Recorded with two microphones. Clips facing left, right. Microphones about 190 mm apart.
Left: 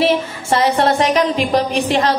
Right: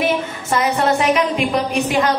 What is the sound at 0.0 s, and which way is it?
A woman's voice, 30° left (ahead or behind).